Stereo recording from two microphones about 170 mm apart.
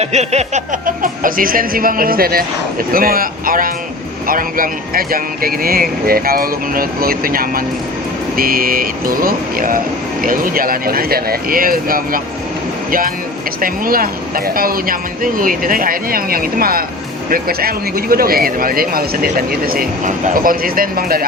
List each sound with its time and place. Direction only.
0.0 s speech: 40° right (ahead or behind); by 12.2 s 55° right (ahead or behind)
13.6 s speech: 55° right (ahead or behind)